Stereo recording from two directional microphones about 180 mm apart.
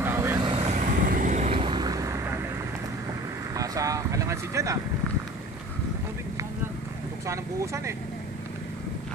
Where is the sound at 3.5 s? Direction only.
20° right (ahead or behind).